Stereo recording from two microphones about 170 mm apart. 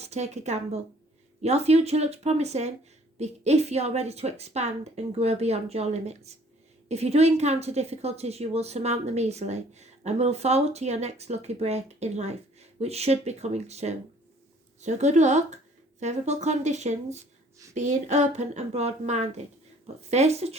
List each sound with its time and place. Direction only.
0.0 s a woman's voice: 40° right (ahead or behind)